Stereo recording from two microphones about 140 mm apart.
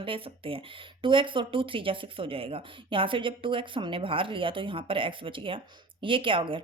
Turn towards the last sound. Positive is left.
turn(degrees=-35)  # may be behind; listen again after turning